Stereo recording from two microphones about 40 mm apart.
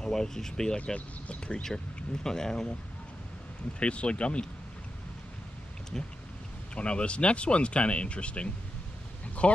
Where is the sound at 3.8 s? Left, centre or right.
Left.